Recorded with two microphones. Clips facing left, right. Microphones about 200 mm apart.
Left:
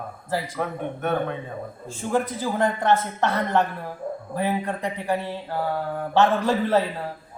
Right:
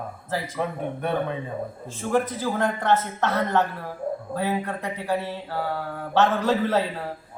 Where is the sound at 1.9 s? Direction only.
15° left (ahead or behind).